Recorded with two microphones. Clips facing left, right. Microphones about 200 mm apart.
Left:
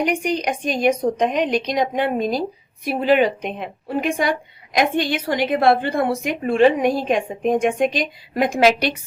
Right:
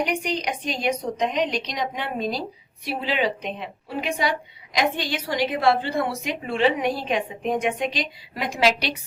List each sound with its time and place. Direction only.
0.0 s a woman's voice: 50° left (ahead or behind)